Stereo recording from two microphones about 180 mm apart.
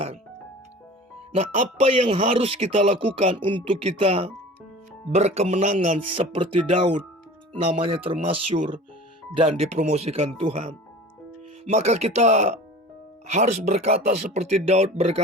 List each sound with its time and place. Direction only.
1.3 s speech: 35° right (ahead or behind)
7.6 s speech: 30° right (ahead or behind)